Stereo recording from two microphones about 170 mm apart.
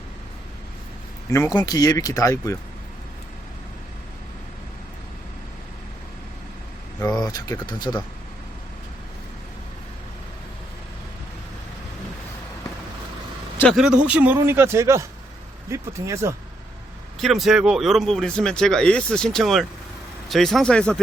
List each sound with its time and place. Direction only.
1.3 s speech: 20° left (ahead or behind)
7.0 s speech: 20° left (ahead or behind)
13.7 s a man's voice: 5° right (ahead or behind)
17.2 s speech: centre (ahead or behind)